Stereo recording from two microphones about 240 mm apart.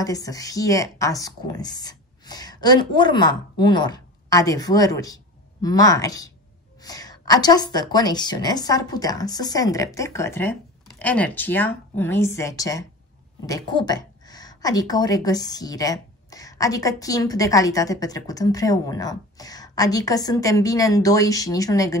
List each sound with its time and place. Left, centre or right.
0.0 s a woman's voice: centre